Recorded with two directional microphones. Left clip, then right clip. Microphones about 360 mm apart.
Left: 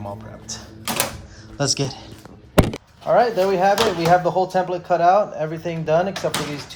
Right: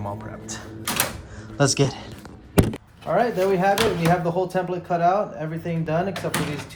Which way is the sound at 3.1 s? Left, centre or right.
Left.